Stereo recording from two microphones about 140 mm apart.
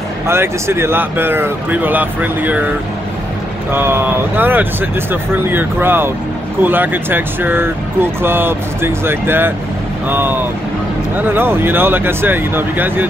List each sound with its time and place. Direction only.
0.3 s speech: 20° right (ahead or behind)
3.7 s speech: 15° right (ahead or behind)